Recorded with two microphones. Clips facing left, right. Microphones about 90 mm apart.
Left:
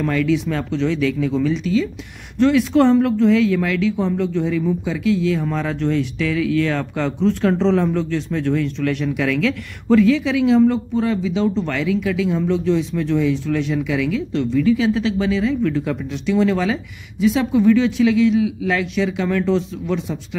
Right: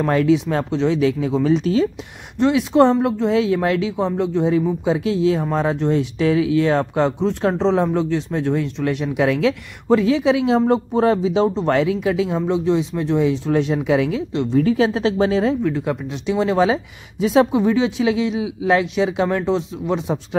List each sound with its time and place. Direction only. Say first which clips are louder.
0.0 s speech: right 2 dB; 35° right (ahead or behind)
2.3 s speech: even; 20° right (ahead or behind)
4.2 s speech: right 1 dB; 20° right (ahead or behind)
4.5 s speech: right 3 dB; 30° right (ahead or behind)
15.8 s speech: even; 20° right (ahead or behind); by 17.5 s 35° right (ahead or behind)
17.5 s speech: left 3 dB; 25° right (ahead or behind)